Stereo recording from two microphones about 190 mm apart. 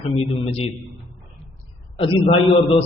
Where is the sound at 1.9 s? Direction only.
30° left (ahead or behind).